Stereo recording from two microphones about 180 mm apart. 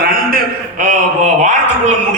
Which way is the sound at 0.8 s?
45° right (ahead or behind).